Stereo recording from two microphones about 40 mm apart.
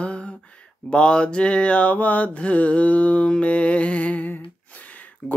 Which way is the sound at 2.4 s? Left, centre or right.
Left.